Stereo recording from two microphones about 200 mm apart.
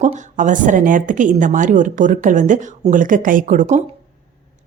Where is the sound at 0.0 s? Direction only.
35° right (ahead or behind).